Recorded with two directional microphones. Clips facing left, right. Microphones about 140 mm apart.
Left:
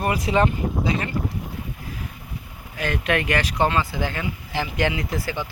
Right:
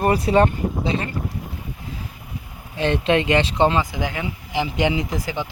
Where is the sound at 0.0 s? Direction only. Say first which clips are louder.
Right 4 dB; 35° right (ahead or behind).